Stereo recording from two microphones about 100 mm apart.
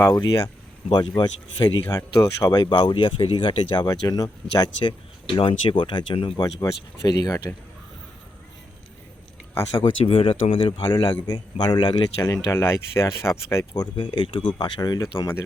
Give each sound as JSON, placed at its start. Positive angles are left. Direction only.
{"t": 0.1, "sound": "speech", "side_deg": 40}
{"t": 1.9, "sound": "speech", "side_deg": 35}
{"t": 6.4, "sound": "speech", "side_deg": 40}
{"t": 9.7, "sound": "speech", "side_deg": 60}
{"t": 12.2, "sound": "speech", "side_deg": 30}
{"t": 13.7, "sound": "speech", "side_deg": 50}